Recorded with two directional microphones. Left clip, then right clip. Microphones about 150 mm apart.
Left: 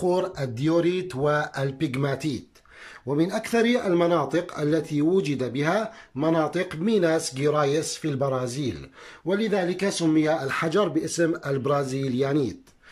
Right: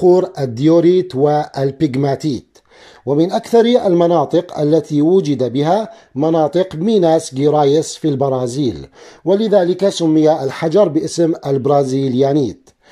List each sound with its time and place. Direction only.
0.0 s speech: 25° right (ahead or behind)